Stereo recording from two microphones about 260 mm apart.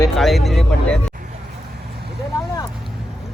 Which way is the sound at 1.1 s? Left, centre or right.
Right.